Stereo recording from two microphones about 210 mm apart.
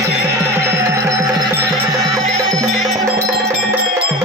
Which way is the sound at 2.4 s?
Centre (ahead or behind).